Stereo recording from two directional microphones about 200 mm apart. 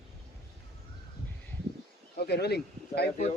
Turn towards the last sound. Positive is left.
turn(degrees=55)  # may be behind; listen again after turning